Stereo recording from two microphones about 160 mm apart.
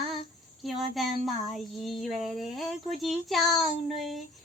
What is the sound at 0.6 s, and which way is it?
A child's voice, centre (ahead or behind).